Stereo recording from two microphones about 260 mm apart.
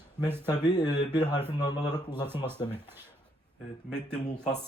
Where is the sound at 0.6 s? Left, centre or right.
Centre.